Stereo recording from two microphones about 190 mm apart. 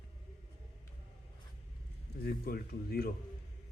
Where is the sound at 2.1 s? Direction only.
50° left (ahead or behind).